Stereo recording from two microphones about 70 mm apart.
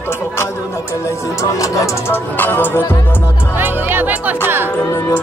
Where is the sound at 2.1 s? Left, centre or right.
Left.